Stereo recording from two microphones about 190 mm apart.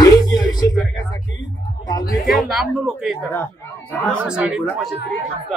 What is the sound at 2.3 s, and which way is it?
Speech, centre (ahead or behind).